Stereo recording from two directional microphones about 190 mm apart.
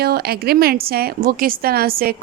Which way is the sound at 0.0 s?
55° right (ahead or behind).